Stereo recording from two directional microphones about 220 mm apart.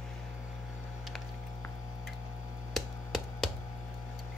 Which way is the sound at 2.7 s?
Centre (ahead or behind).